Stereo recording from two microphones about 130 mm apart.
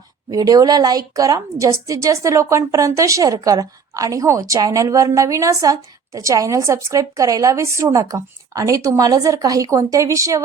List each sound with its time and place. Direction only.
0.3 s a woman's voice: 30° right (ahead or behind)